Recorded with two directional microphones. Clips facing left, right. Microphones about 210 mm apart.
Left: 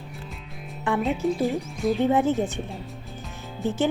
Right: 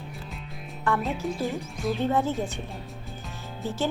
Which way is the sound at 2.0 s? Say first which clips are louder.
Left 4 dB; 15° left (ahead or behind).